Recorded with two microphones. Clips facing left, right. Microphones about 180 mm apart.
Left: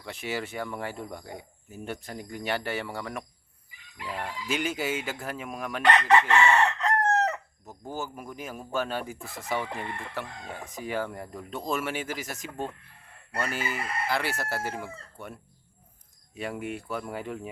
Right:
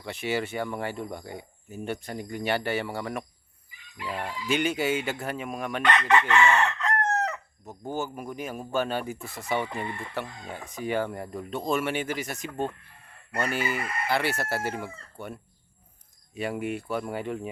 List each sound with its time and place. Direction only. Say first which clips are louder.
0.0 s speech: right 4 dB; centre (ahead or behind)
4.4 s speech: right 4 dB; centre (ahead or behind)
5.8 s chicken: left 2 dB; 35° left (ahead or behind)
7.7 s speech: right 4 dB; centre (ahead or behind)